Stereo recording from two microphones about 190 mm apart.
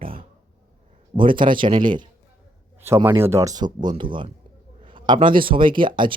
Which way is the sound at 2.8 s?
10° right (ahead or behind).